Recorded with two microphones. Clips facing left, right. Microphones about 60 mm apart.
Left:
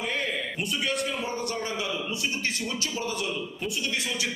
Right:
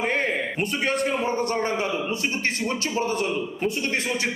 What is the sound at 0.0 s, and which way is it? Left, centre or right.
A man's voice, right.